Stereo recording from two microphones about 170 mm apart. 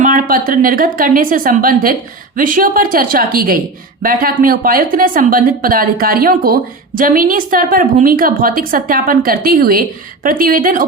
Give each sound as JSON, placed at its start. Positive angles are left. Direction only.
{"t": 0.0, "sound": "a woman's voice", "side_deg": -55}